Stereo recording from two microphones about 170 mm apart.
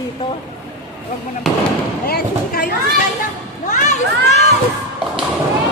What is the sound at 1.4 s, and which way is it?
Speech, centre (ahead or behind).